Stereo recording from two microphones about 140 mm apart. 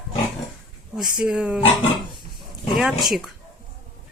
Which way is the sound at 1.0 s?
5° right (ahead or behind).